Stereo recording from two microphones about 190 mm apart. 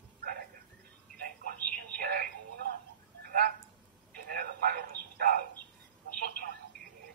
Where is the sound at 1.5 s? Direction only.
50° right (ahead or behind).